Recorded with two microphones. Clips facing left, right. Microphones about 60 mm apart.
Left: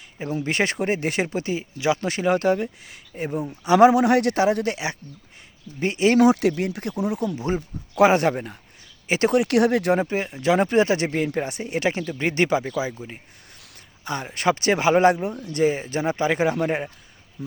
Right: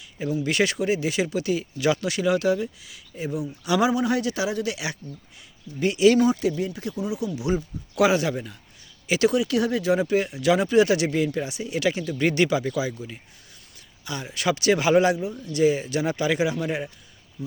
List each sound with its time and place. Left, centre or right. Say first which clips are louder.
0.2 s speech: right 1 dB; left
3.5 s speech: left 7 dB; left
3.8 s speech: left 8 dB; left
5.0 s speech: right 4 dB; centre
5.8 s speech: right 2 dB; left
6.1 s speech: left 4 dB; left
9.3 s speech: left 4 dB; left
10.0 s speech: right 2 dB; left
10.6 s speech: even; left
14.0 s speech: left 4 dB; left